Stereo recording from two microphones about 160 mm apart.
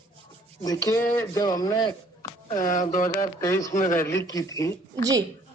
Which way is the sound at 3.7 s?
55° left (ahead or behind).